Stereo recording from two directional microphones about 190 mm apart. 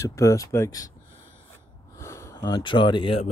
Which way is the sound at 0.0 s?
15° left (ahead or behind).